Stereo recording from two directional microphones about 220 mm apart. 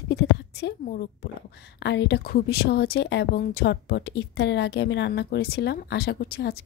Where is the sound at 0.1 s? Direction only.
50° left (ahead or behind).